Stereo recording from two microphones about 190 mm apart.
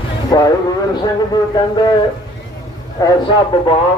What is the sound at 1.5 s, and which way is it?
Speech, 25° left (ahead or behind).